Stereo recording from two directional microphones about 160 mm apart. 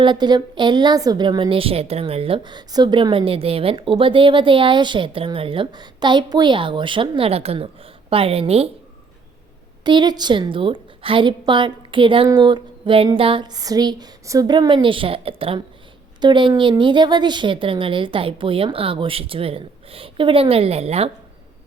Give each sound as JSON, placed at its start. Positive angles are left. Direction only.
{"t": 0.0, "sound": "a woman's voice", "side_deg": -30}
{"t": 9.8, "sound": "a woman's voice", "side_deg": -30}